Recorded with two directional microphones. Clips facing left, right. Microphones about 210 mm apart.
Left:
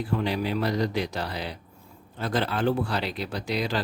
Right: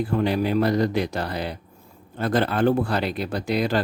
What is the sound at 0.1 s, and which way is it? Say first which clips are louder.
Speech: right 3 dB; 45° right (ahead or behind).